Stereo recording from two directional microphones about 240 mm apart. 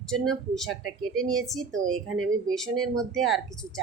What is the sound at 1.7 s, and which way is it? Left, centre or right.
Speech, right.